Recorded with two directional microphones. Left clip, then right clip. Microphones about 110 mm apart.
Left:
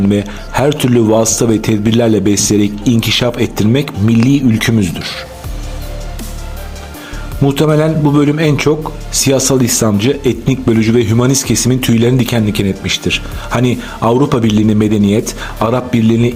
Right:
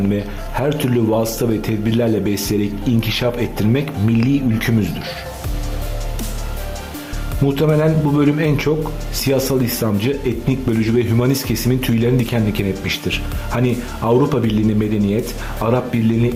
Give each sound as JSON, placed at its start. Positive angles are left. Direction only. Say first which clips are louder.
{"t": 0.1, "sound": "a man's voice", "louder": "left 7 dB", "side_deg": 50}
{"t": 7.4, "sound": "a man's voice", "louder": "left 4 dB", "side_deg": 50}